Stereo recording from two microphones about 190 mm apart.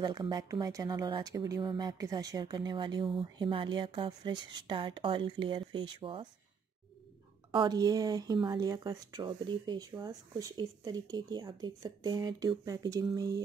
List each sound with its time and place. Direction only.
0.0 s speech: 20° right (ahead or behind)
7.5 s speech: 20° right (ahead or behind)